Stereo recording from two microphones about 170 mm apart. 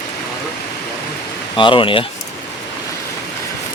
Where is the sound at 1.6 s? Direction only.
30° left (ahead or behind).